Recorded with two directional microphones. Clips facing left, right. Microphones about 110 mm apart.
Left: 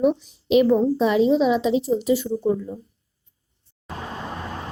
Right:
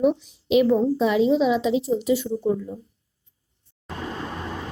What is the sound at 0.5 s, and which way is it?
A woman's voice, 45° left (ahead or behind).